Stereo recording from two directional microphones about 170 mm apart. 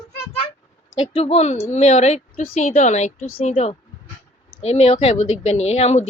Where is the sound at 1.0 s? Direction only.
30° left (ahead or behind).